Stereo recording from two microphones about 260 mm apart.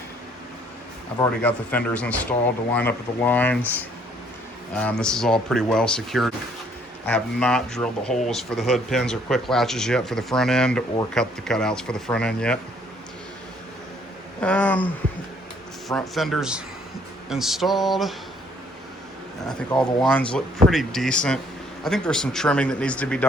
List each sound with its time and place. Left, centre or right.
1.2 s speech: centre
14.4 s speech: centre
15.9 s speech: centre
19.5 s speech: centre